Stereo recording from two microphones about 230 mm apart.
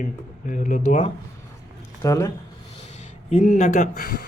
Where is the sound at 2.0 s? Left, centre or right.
Centre.